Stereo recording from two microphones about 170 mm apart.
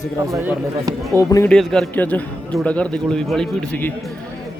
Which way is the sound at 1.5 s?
5° left (ahead or behind).